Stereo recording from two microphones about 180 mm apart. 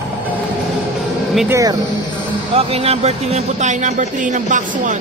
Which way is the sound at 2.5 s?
35° right (ahead or behind).